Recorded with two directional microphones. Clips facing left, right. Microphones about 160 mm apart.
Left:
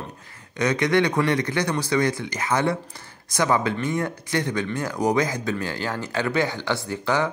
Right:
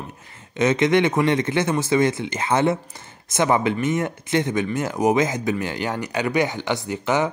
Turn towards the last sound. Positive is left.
turn(degrees=-20)  # may be behind; listen again after turning